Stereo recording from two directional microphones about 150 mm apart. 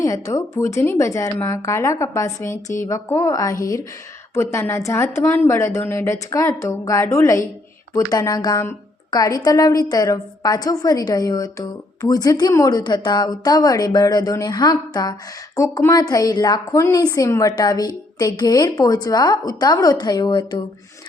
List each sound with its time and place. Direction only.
0.0 s a woman's voice: 20° left (ahead or behind)